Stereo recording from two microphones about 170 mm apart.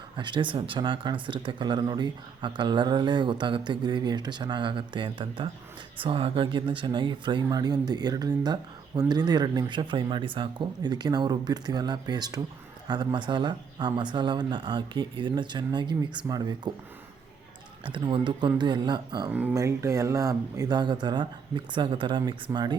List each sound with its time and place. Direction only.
0.2 s speech: 25° right (ahead or behind)
17.8 s speech: 30° right (ahead or behind)
19.3 s speech: 15° right (ahead or behind)